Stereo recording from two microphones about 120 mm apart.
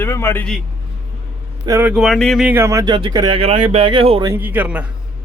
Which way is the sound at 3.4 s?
55° right (ahead or behind).